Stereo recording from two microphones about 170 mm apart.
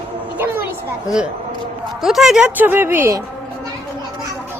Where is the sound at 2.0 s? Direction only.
Centre (ahead or behind).